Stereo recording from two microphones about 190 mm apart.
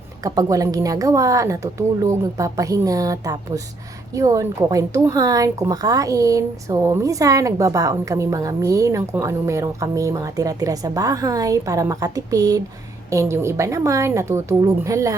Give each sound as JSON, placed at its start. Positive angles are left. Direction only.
{"t": 0.2, "sound": "a woman's voice", "side_deg": -20}